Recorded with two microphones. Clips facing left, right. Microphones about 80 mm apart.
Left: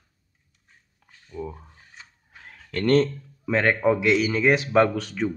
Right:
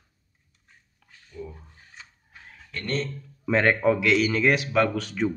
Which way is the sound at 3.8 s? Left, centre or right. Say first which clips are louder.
Left 1 dB; centre.